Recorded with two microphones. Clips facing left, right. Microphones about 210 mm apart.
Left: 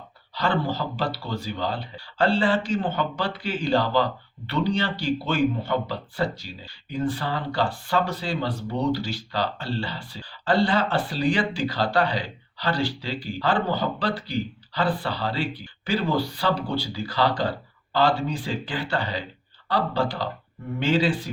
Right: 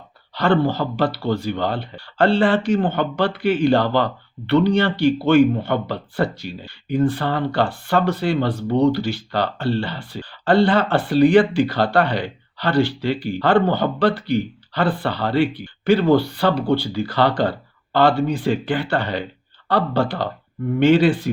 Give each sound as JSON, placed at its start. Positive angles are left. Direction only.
{"t": 0.3, "sound": "speech", "side_deg": -60}